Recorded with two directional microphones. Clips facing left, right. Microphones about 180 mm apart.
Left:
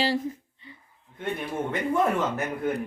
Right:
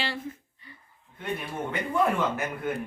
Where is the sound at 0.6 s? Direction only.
20° left (ahead or behind).